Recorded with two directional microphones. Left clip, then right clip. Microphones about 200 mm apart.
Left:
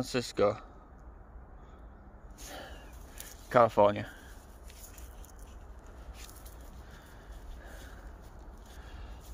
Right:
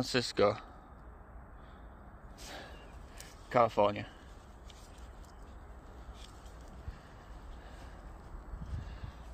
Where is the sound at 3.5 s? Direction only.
25° left (ahead or behind).